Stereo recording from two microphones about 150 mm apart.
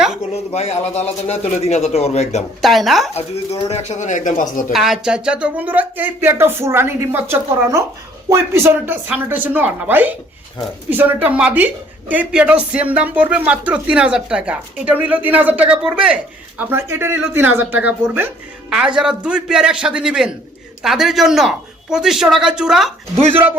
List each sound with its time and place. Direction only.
0.5 s a man's voice: 45° left (ahead or behind)
2.6 s speech: centre (ahead or behind)
3.2 s a man's voice: 45° left (ahead or behind); by 4.6 s 60° left (ahead or behind)
4.7 s speech: centre (ahead or behind)